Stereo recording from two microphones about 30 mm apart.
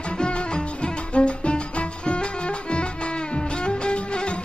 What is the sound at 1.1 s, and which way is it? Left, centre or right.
Music, left.